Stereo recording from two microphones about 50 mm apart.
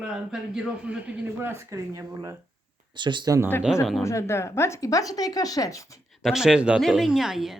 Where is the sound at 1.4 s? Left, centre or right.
Right.